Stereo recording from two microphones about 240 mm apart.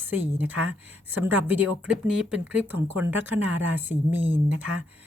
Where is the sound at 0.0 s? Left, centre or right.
Centre.